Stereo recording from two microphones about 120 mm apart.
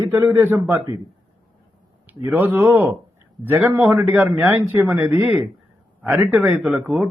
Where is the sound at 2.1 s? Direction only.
15° right (ahead or behind).